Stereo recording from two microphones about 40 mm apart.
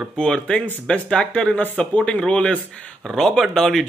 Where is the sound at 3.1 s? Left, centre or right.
Centre.